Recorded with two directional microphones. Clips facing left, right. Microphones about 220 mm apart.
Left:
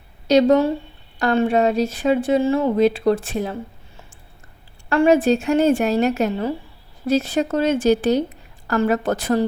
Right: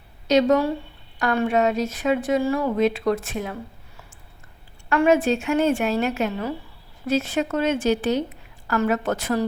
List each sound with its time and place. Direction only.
0.3 s speech: 35° left (ahead or behind)